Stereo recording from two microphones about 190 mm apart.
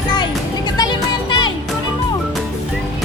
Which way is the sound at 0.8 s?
25° left (ahead or behind).